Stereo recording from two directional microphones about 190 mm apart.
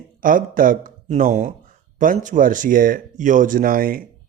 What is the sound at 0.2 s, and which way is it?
Speech, 45° right (ahead or behind).